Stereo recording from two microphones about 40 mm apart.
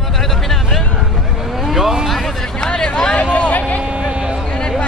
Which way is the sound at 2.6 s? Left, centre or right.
Centre.